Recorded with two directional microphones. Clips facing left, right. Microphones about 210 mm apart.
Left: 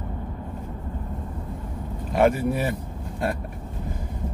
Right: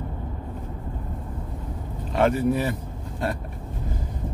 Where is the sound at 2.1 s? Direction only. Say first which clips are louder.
Even; 10° left (ahead or behind).